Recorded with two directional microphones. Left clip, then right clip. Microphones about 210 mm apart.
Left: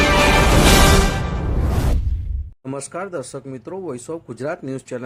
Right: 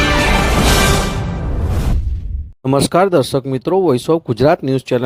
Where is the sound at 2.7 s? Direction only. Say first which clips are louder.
Right 15 dB; 40° right (ahead or behind).